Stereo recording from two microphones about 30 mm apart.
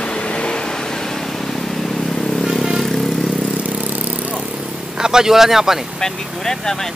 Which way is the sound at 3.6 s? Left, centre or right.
Right.